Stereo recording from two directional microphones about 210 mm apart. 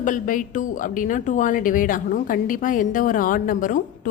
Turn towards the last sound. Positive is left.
turn(degrees=40)  # may be behind; listen again after turning